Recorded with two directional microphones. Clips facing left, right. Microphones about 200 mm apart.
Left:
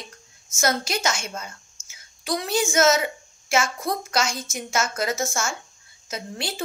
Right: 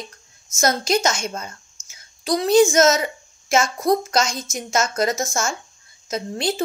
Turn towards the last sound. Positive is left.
turn(degrees=-40)  # may be behind; listen again after turning